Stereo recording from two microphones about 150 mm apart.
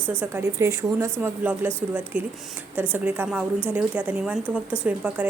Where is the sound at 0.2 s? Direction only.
15° right (ahead or behind).